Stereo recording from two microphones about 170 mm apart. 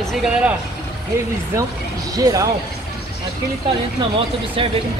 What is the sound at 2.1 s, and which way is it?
Speech, 20° right (ahead or behind).